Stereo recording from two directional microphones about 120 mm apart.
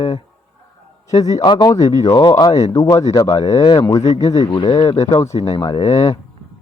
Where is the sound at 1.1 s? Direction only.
30° left (ahead or behind).